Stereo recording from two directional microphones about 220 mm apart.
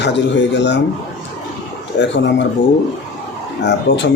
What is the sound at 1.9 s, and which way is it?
Speech, 55° left (ahead or behind).